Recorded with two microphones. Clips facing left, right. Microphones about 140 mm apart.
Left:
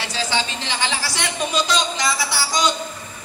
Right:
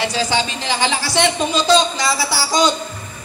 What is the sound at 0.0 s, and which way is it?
Speech, 15° right (ahead or behind).